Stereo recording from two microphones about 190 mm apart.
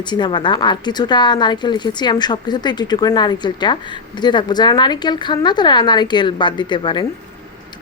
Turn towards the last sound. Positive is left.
turn(degrees=25)  # may be behind; listen again after turning